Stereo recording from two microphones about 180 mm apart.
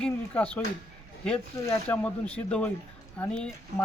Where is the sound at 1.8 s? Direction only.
5° left (ahead or behind).